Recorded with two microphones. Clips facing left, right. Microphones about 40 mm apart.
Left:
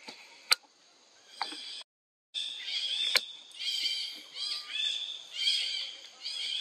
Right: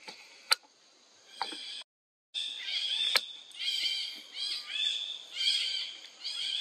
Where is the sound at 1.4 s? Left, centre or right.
Centre.